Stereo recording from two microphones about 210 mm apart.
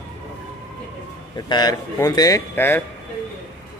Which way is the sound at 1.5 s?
20° left (ahead or behind).